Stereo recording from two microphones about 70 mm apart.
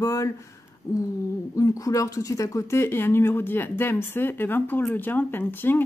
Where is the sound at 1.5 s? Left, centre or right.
Left.